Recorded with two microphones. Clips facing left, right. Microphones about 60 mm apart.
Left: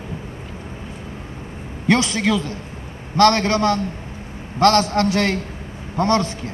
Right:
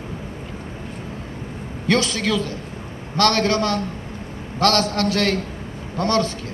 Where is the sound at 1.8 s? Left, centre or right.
Left.